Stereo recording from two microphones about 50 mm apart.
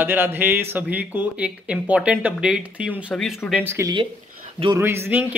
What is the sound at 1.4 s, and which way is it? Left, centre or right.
Speech, right.